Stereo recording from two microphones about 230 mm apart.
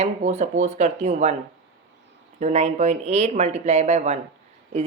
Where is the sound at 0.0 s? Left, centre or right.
Right.